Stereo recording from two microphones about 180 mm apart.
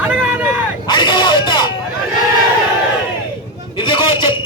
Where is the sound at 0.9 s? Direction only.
25° left (ahead or behind).